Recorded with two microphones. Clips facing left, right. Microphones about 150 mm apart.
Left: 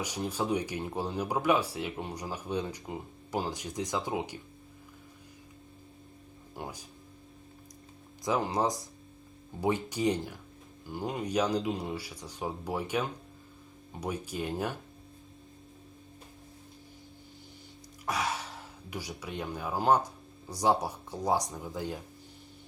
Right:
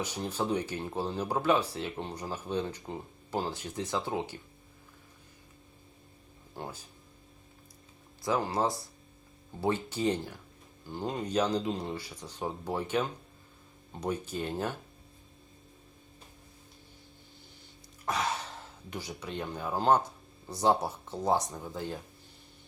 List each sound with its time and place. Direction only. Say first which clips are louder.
0.0 s speech: even; 10° left (ahead or behind)
6.6 s speech: even; 15° left (ahead or behind)
8.2 s speech: even; 15° left (ahead or behind)
18.0 s speech: right 1 dB; 10° left (ahead or behind)